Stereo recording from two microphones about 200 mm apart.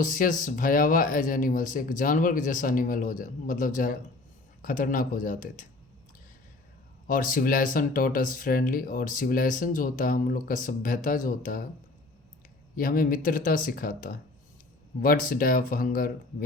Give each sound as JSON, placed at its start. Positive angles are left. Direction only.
{"t": 0.0, "sound": "speech", "side_deg": 40}
{"t": 7.1, "sound": "speech", "side_deg": 45}
{"t": 12.7, "sound": "speech", "side_deg": 45}